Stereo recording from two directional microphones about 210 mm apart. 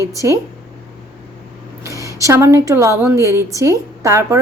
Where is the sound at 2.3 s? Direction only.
15° right (ahead or behind).